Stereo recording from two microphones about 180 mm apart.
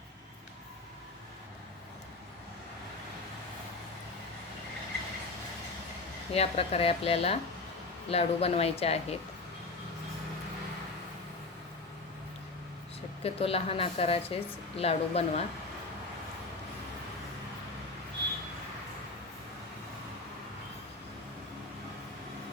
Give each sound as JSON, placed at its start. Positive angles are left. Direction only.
{"t": 6.3, "sound": "a woman's voice", "side_deg": 35}
{"t": 13.2, "sound": "a woman's voice", "side_deg": 30}